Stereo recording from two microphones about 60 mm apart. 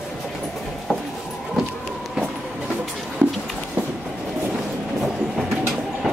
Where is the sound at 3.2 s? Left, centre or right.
Right.